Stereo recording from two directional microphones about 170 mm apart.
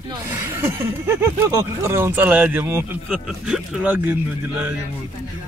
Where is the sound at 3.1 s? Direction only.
Centre (ahead or behind).